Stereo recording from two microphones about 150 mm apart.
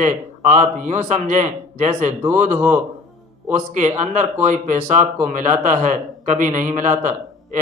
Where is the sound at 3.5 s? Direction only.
50° right (ahead or behind).